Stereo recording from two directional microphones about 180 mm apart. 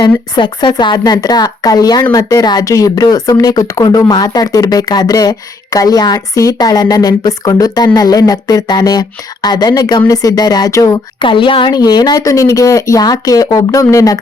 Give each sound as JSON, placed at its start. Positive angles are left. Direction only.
{"t": 0.0, "sound": "speech", "side_deg": 25}